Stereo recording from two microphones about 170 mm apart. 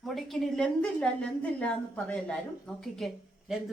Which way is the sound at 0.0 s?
Centre (ahead or behind).